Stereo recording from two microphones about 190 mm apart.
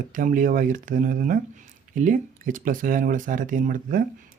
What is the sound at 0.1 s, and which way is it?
Speech, 45° right (ahead or behind).